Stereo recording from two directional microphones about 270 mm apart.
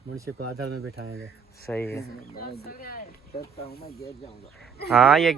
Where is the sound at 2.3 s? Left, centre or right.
Left.